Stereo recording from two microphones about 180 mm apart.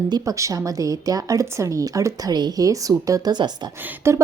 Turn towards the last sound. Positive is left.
turn(degrees=-15)  # may be behind; listen again after turning